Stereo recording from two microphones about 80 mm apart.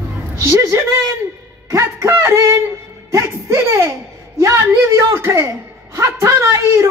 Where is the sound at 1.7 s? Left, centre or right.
Right.